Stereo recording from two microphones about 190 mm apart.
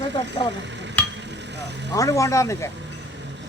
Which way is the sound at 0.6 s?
70° right (ahead or behind).